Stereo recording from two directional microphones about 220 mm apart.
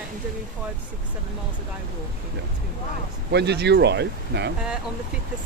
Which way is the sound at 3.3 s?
50° right (ahead or behind).